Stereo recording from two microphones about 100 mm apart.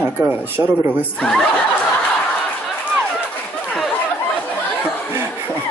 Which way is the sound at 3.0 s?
10° left (ahead or behind).